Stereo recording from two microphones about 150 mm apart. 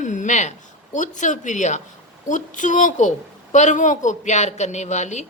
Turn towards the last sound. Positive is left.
turn(degrees=50)  # may be behind; listen again after turning